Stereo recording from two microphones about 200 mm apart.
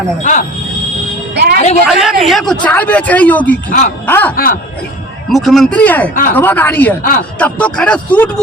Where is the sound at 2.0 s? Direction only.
Centre (ahead or behind).